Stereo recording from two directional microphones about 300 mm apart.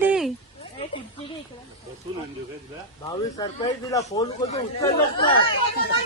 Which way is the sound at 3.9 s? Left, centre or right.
Centre.